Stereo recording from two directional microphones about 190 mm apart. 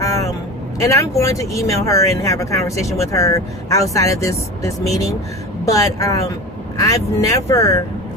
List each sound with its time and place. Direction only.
0.0 s vehicle: 15° left (ahead or behind)
0.8 s speech: 15° left (ahead or behind)